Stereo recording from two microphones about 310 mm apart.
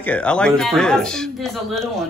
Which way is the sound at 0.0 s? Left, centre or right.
Centre.